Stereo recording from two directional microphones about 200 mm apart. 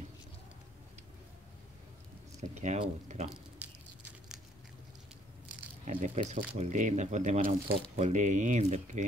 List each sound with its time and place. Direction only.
2.4 s speech: 35° right (ahead or behind)
3.3 s squish: 5° right (ahead or behind)
5.9 s speech: 35° right (ahead or behind)